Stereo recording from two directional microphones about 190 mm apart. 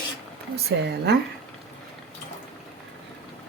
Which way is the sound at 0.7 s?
60° right (ahead or behind).